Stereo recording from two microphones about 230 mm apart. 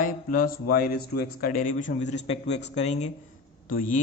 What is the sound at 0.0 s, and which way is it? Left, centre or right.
Speech, left.